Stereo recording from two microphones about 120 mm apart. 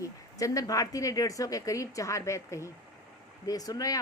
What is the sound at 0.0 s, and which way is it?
A woman's voice, 25° left (ahead or behind).